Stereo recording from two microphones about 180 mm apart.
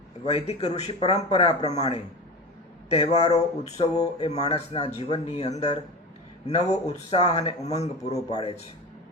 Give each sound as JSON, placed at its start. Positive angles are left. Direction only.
{"t": 0.3, "sound": "speech", "side_deg": 35}